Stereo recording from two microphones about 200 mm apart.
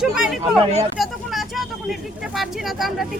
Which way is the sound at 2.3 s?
Centre (ahead or behind).